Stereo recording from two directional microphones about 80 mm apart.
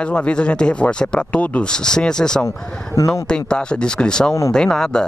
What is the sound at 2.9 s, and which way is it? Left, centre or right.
Speech, left.